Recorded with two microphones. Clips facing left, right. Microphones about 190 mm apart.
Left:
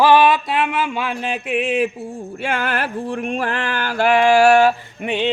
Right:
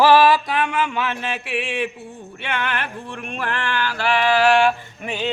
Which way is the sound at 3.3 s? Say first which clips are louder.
Left 4 dB; 40° left (ahead or behind).